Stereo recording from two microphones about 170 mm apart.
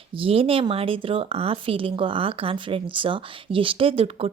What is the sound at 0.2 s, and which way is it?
Speech, 35° right (ahead or behind).